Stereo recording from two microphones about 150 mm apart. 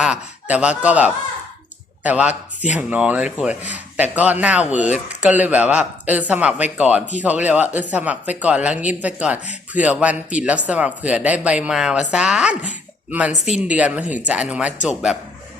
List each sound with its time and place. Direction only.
0.0 s speech: 10° right (ahead or behind)
2.0 s a woman's voice: 10° right (ahead or behind)
13.4 s speech: 50° left (ahead or behind)
13.7 s a man's voice: 10° right (ahead or behind)